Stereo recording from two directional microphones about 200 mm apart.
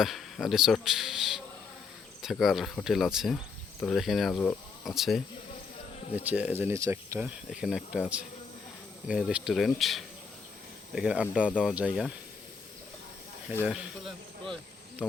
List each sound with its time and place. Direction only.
0.0 s a man's voice: centre (ahead or behind)
6.2 s speech: 10° right (ahead or behind)
13.7 s speech: 5° right (ahead or behind)